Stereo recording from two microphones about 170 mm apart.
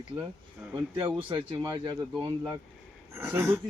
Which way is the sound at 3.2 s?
10° right (ahead or behind).